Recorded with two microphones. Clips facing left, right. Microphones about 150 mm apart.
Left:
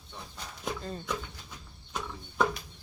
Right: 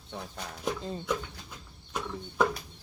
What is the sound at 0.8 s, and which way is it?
Speech, 20° right (ahead or behind).